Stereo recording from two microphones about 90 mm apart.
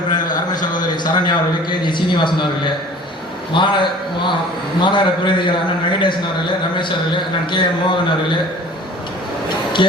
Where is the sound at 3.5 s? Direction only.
65° left (ahead or behind).